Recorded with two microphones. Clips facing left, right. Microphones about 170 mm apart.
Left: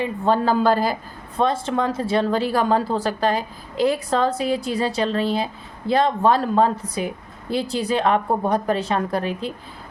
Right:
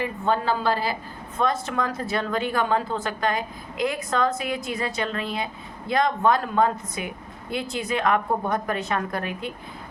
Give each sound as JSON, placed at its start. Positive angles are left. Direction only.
{"t": 0.3, "sound": "a woman's voice", "side_deg": 45}
{"t": 1.4, "sound": "speech", "side_deg": 30}